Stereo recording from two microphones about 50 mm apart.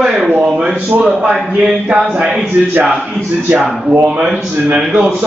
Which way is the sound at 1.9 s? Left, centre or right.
Centre.